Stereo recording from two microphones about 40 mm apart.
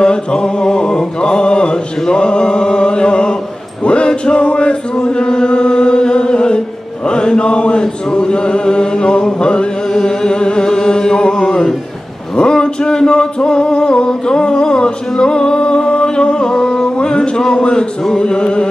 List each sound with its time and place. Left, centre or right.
0.0 s chant: centre
12.4 s male singing: left
18.0 s music: centre